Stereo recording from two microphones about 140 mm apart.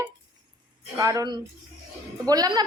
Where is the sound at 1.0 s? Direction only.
25° right (ahead or behind).